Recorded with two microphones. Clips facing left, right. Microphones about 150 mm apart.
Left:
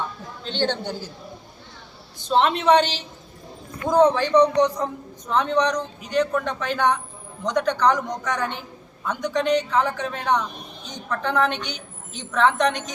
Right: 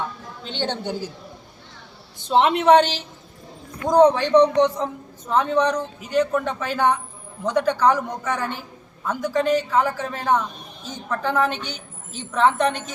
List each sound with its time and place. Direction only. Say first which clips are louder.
0.4 s speech: left 2 dB; 15° right (ahead or behind)
2.3 s speech: right 2 dB; 15° right (ahead or behind)
3.8 s a man's voice: right 2 dB; 15° right (ahead or behind)
11.6 s a woman's voice: even; 15° left (ahead or behind)
12.2 s speech: right 1 dB; 10° right (ahead or behind)